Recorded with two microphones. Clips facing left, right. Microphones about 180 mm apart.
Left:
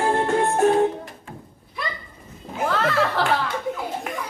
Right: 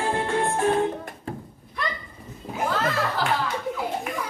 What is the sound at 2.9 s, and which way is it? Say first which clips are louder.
Music: left 4 dB; 65° left (ahead or behind).